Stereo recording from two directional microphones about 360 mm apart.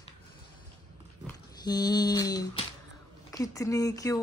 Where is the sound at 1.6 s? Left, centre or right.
Centre.